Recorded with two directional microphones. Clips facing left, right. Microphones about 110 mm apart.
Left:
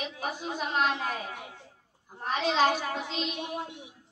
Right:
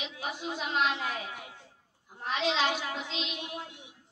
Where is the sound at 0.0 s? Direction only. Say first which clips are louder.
Left 2 dB; 45° left (ahead or behind).